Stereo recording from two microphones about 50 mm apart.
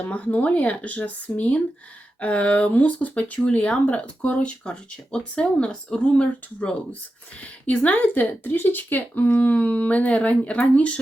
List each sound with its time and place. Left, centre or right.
0.0 s speech: left
7.4 s speech: left